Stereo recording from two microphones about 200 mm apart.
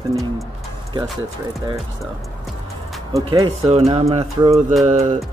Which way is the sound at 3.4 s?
30° right (ahead or behind).